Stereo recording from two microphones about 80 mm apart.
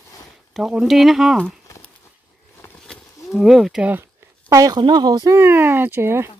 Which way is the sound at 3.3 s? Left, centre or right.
Centre.